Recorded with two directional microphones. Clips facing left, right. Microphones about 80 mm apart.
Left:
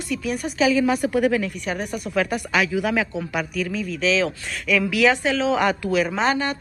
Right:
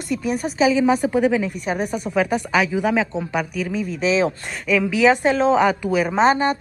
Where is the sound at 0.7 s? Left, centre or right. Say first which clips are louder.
Right 2 dB; centre.